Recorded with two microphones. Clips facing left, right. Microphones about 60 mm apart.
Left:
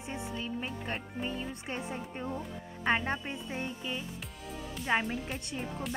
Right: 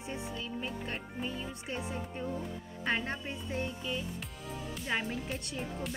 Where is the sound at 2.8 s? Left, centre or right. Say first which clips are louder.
Left 4 dB; left.